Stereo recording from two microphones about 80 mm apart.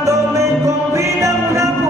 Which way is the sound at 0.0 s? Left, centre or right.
Right.